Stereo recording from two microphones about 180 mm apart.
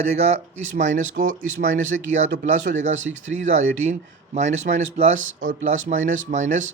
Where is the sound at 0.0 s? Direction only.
40° right (ahead or behind).